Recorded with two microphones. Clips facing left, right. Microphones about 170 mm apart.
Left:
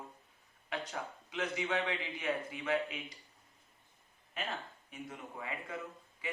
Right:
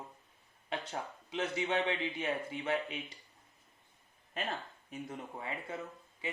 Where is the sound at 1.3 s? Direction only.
30° right (ahead or behind).